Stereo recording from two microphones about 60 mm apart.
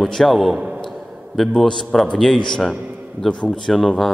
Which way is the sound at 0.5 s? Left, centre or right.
Centre.